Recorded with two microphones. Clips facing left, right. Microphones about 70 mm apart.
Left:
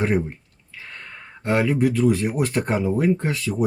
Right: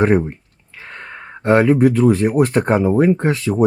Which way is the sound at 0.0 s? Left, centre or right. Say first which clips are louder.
Right 7 dB; right.